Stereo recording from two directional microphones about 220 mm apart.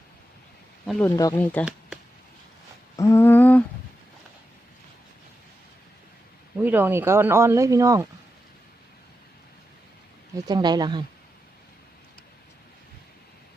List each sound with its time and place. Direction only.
1.0 s speech: 15° left (ahead or behind)
2.9 s humming: 15° left (ahead or behind)
6.6 s speech: 10° right (ahead or behind)
10.3 s speech: 20° right (ahead or behind)